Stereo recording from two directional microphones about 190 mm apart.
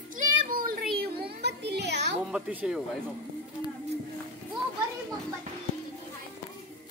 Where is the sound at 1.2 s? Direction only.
60° right (ahead or behind).